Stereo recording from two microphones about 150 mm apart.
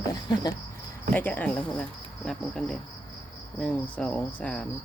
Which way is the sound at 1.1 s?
10° left (ahead or behind).